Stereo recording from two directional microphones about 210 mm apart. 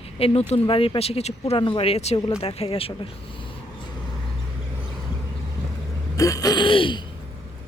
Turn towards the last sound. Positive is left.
turn(degrees=25)  # may be behind; listen again after turning